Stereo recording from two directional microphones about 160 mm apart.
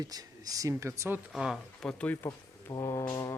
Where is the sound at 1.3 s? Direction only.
Centre (ahead or behind); by 2.7 s 15° left (ahead or behind).